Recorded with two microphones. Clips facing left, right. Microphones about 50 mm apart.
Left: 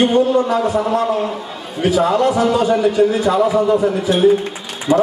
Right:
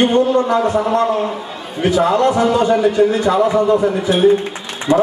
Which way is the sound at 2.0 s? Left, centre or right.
Centre.